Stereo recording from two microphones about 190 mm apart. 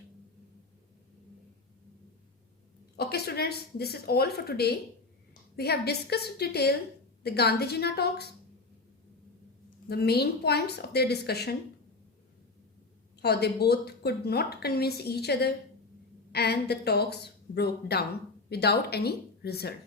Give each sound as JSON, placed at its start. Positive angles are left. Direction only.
{"t": 2.9, "sound": "a woman's voice", "side_deg": 55}
{"t": 9.9, "sound": "a woman's voice", "side_deg": 55}
{"t": 13.2, "sound": "a woman's voice", "side_deg": 55}